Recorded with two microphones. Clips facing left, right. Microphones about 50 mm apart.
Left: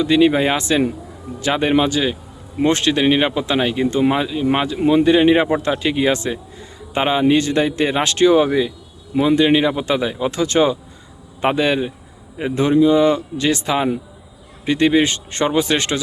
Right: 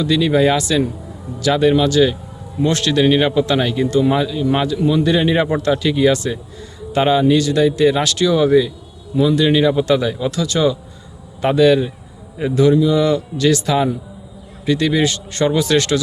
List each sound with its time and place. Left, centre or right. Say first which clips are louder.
0.0 s a man's voice: even; left
1.9 s a man's voice: right 6 dB; centre
4.8 s a man's voice: left 5 dB; left